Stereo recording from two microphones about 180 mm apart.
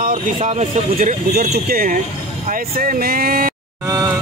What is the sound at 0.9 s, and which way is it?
Speech, 50° right (ahead or behind).